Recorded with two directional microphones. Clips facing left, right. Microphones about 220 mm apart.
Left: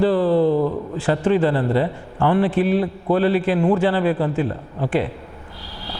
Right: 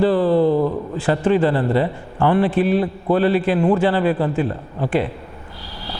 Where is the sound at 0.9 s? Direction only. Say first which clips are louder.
Right 1 dB; 15° right (ahead or behind).